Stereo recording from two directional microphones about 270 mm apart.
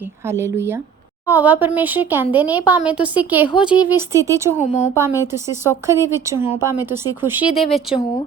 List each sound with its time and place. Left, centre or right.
0.3 s speech: centre
4.5 s a woman's voice: left
4.9 s speech: centre